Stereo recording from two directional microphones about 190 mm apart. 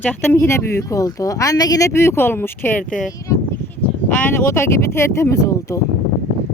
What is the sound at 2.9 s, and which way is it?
Speech, centre (ahead or behind).